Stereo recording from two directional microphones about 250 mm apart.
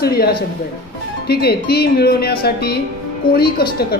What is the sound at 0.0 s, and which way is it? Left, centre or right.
Speech, left.